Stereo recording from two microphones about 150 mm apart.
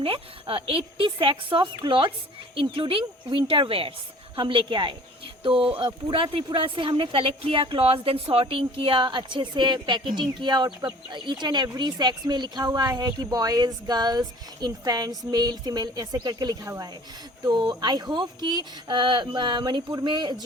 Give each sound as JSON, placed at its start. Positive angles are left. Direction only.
{"t": 0.0, "sound": "a woman's voice", "side_deg": -35}